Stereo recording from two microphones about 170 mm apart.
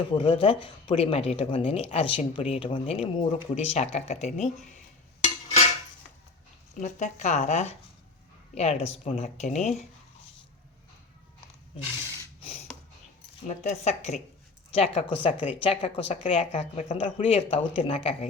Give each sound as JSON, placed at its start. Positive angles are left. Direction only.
{"t": 0.2, "sound": "speech", "side_deg": 35}
{"t": 5.2, "sound": "a sound", "side_deg": 40}
{"t": 6.7, "sound": "speech", "side_deg": 45}
{"t": 13.5, "sound": "speech", "side_deg": 40}